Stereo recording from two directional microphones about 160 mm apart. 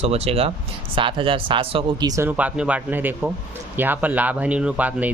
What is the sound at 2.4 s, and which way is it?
Speech, 10° right (ahead or behind).